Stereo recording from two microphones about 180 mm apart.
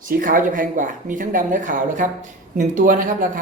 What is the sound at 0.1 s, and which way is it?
Speech, 50° right (ahead or behind).